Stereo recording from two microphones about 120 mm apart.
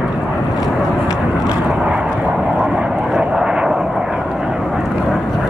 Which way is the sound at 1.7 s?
10° right (ahead or behind).